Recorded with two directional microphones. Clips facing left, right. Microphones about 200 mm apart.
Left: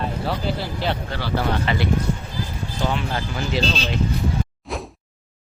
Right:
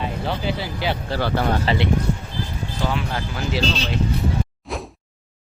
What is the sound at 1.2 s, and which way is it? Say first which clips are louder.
Speech: right 2 dB; 50° right (ahead or behind).